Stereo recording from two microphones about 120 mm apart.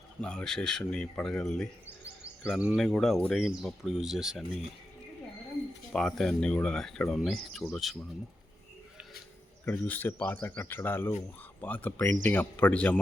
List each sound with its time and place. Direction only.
0.2 s speech: 5° left (ahead or behind)
5.9 s speech: 5° left (ahead or behind)
9.6 s speech: 15° left (ahead or behind)